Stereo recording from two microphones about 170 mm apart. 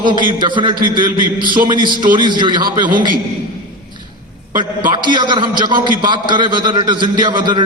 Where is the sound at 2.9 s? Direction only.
50° right (ahead or behind).